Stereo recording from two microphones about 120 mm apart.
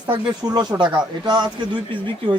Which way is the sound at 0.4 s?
30° right (ahead or behind).